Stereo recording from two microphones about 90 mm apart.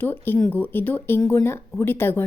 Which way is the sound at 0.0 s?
20° left (ahead or behind).